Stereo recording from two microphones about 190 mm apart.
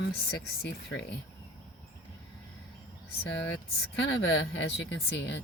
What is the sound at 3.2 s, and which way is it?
Speech, 65° left (ahead or behind).